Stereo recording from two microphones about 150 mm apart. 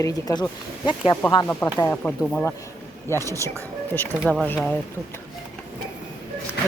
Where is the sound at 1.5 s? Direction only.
15° left (ahead or behind).